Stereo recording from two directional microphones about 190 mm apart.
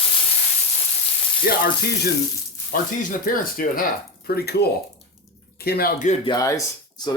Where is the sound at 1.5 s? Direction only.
50° left (ahead or behind).